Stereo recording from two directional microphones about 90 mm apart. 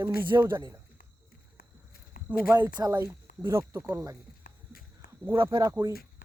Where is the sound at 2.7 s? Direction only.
45° right (ahead or behind).